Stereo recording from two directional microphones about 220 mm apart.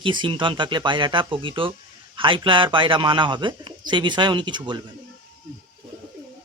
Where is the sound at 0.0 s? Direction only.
20° right (ahead or behind).